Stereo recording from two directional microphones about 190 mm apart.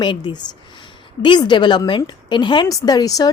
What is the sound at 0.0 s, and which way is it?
A woman's voice, 25° left (ahead or behind).